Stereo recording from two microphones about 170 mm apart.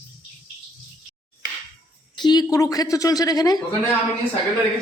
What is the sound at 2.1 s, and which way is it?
A woman's voice, 25° left (ahead or behind).